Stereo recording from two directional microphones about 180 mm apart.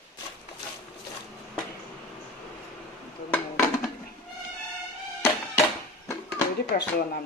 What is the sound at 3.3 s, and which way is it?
Dishes, 10° left (ahead or behind).